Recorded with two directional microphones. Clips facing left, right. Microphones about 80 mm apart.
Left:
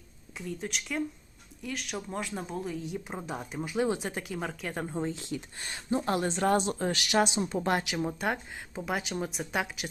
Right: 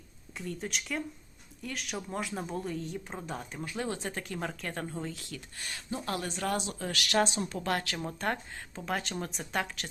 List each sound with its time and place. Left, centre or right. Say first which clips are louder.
0.3 s speech: left 1 dB; centre
4.9 s speech: left 6 dB; left
7.9 s speech: left 3 dB; centre